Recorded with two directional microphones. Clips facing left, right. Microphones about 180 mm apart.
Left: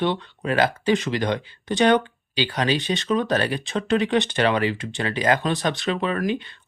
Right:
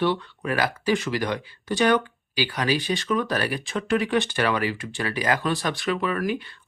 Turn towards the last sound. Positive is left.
turn(degrees=25)  # may be behind; listen again after turning